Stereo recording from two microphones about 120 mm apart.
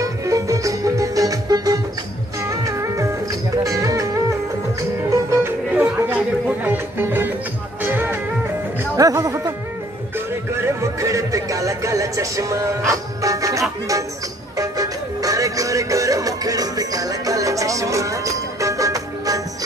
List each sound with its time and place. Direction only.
0.0 s music: 25° right (ahead or behind)
8.9 s music: 30° right (ahead or behind)